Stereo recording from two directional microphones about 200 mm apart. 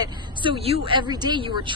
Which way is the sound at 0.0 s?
25° right (ahead or behind).